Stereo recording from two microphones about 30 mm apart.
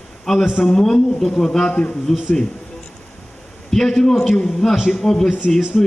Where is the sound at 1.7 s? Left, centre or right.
Left.